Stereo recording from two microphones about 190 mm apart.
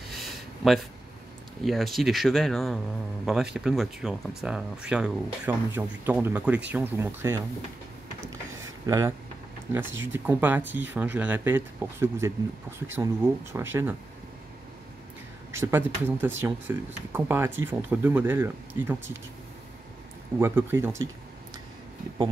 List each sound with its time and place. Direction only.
0.1 s a sound: centre (ahead or behind)
1.6 s speech: centre (ahead or behind)
8.8 s speech: 15° right (ahead or behind)
15.5 s speech: 10° right (ahead or behind)
20.3 s speech: 15° right (ahead or behind)